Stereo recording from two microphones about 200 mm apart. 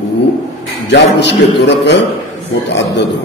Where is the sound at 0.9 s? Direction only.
60° left (ahead or behind).